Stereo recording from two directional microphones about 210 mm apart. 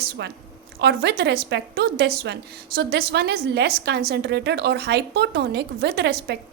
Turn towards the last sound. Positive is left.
turn(degrees=-50)  # may be behind; listen again after turning